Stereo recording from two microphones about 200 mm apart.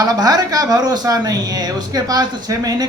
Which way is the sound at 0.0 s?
20° right (ahead or behind).